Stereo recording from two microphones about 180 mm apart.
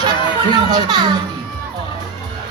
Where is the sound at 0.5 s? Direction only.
20° right (ahead or behind).